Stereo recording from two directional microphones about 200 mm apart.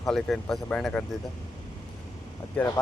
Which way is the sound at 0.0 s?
Centre (ahead or behind).